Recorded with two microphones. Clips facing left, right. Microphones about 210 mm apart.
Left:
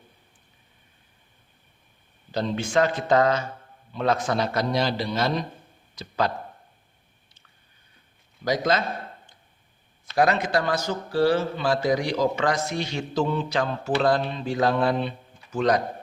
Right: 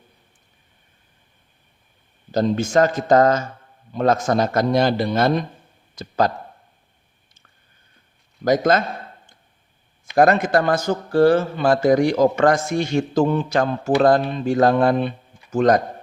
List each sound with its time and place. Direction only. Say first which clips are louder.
2.3 s a man's voice: right 6 dB; 45° right (ahead or behind)
8.4 s a man's voice: right 6 dB; 50° right (ahead or behind)
10.2 s a man's voice: right 6 dB; 50° right (ahead or behind)